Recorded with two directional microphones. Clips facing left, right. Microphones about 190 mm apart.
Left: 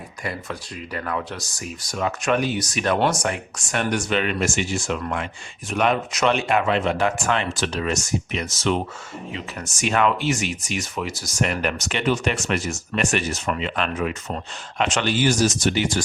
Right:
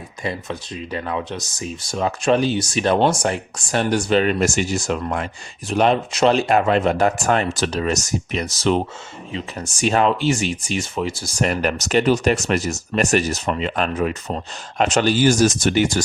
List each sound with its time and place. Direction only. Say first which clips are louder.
0.9 s speech: right 2 dB; 20° right (ahead or behind); by 16.0 s 50° right (ahead or behind)